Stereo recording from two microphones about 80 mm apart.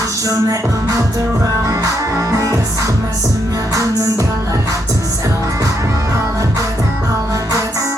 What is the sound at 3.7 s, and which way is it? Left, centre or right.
Music, right.